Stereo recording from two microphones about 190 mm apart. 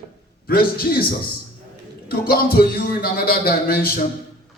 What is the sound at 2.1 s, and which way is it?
A man's voice, 55° left (ahead or behind).